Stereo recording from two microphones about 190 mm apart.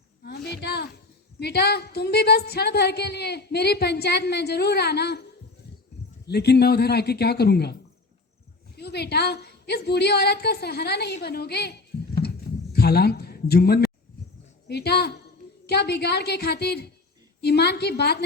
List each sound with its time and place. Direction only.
0.3 s a sound: 60° left (ahead or behind)
1.4 s speech: 60° left (ahead or behind)
6.2 s a man's voice: 60° left (ahead or behind)